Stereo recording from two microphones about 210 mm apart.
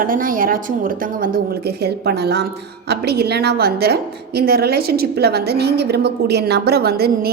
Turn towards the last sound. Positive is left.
turn(degrees=-50)  # may be behind; listen again after turning